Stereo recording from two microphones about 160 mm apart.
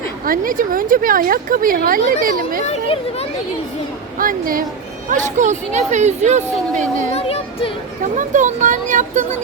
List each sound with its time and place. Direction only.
0.3 s speech: 60° right (ahead or behind)
2.6 s speech: 40° left (ahead or behind)
4.2 s speech: 60° right (ahead or behind)
5.0 s speech: 50° right (ahead or behind)
7.1 s speech: 40° left (ahead or behind)
8.1 s speech: 50° right (ahead or behind)